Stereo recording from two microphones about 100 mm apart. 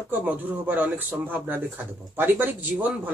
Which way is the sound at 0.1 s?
20° right (ahead or behind).